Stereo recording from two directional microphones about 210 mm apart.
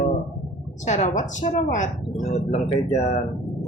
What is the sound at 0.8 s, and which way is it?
A woman's voice, 35° left (ahead or behind).